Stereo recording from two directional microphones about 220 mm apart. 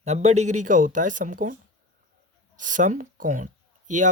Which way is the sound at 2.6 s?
35° right (ahead or behind).